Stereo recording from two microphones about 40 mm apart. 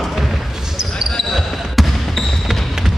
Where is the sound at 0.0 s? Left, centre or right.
Centre.